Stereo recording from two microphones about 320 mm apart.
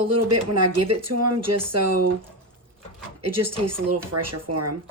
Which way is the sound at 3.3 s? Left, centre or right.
Right.